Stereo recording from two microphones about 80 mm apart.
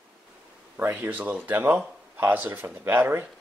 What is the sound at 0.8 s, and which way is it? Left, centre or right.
Speech, right.